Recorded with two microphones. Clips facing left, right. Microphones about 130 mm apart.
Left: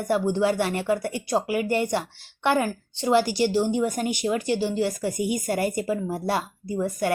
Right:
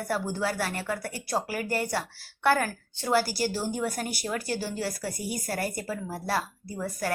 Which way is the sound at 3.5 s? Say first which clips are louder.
Left 7 dB; 15° left (ahead or behind).